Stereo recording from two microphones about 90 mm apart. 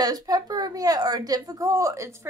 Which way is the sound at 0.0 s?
45° right (ahead or behind).